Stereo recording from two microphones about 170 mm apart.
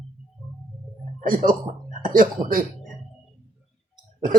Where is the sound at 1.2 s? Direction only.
55° right (ahead or behind).